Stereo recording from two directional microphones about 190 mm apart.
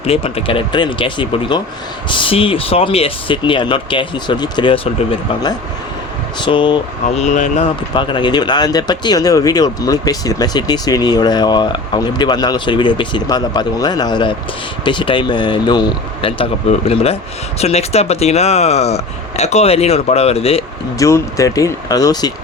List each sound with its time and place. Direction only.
0.0 s speech: 30° left (ahead or behind)
6.4 s speech: 25° left (ahead or behind)
7.2 s speech: 40° left (ahead or behind)
7.9 s speech: 25° left (ahead or behind)
21.0 s speech: 15° left (ahead or behind)